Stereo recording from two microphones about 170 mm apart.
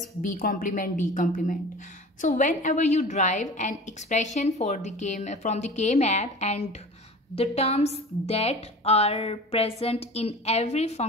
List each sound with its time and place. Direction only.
0.3 s a woman's voice: 55° left (ahead or behind); by 11.1 s 40° left (ahead or behind)